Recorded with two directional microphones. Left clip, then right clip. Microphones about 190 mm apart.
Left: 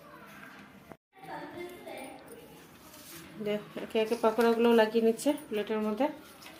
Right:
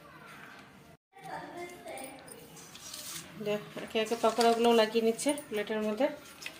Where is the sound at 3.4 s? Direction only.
5° right (ahead or behind).